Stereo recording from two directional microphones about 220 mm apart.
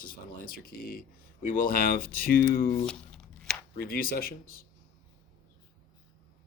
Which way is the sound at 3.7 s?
40° left (ahead or behind).